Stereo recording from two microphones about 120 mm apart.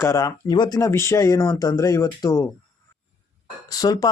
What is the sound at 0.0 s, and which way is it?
Speech, 30° left (ahead or behind).